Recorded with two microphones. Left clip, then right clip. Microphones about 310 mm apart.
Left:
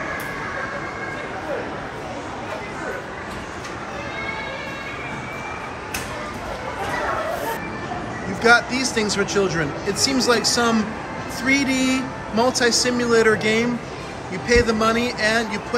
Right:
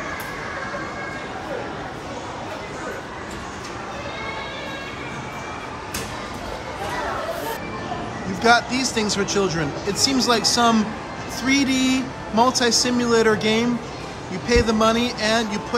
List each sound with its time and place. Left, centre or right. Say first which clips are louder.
8.4 s speech: left 1 dB; centre